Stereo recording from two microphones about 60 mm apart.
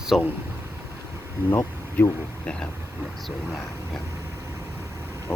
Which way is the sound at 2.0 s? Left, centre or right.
Left.